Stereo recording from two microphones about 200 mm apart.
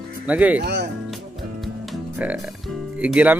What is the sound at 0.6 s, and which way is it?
Speech, 60° right (ahead or behind).